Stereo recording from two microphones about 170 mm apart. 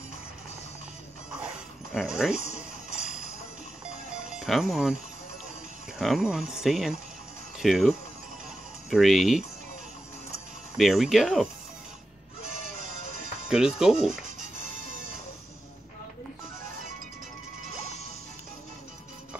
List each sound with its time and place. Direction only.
2.0 s speech: 5° right (ahead or behind)
4.3 s speech: centre (ahead or behind)
5.9 s speech: centre (ahead or behind)
8.9 s speech: centre (ahead or behind)
10.8 s speech: centre (ahead or behind)
13.0 s music: 50° right (ahead or behind)
13.5 s speech: 5° right (ahead or behind)